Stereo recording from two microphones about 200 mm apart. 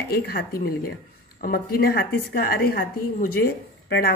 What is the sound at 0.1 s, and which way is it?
A woman's voice, 50° left (ahead or behind).